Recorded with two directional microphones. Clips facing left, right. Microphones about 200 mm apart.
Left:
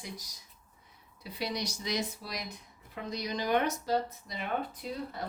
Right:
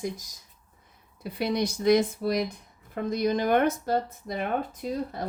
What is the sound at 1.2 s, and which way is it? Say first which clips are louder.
A woman's voice: right 9 dB; 55° right (ahead or behind).